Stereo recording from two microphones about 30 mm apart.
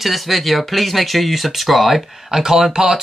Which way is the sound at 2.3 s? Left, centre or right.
Centre.